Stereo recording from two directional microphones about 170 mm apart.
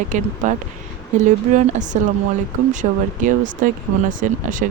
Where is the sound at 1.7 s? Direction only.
45° right (ahead or behind).